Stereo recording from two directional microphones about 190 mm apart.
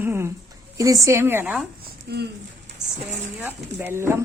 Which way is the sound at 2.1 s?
60° right (ahead or behind).